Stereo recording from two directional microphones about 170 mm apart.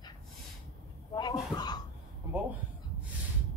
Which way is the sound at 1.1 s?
25° left (ahead or behind).